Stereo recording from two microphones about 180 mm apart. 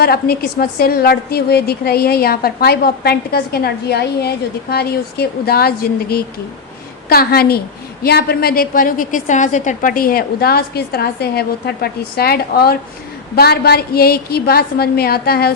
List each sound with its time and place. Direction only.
0.0 s a woman's voice: 60° left (ahead or behind)